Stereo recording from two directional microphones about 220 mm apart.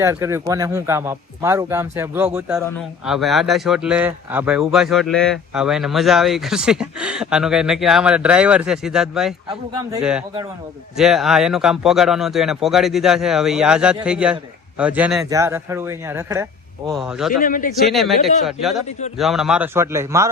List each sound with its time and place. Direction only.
0.0 s a man's voice: 10° right (ahead or behind)
9.5 s a man's voice: 20° right (ahead or behind)
10.0 s a man's voice: 5° right (ahead or behind)
16.9 s speech: centre (ahead or behind)
17.4 s speech: 40° left (ahead or behind)
17.7 s speech: centre (ahead or behind)
18.9 s speech: 30° left (ahead or behind)
19.1 s a man's voice: centre (ahead or behind)